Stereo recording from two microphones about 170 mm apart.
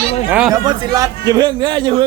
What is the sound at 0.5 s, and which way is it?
Speech, 25° right (ahead or behind).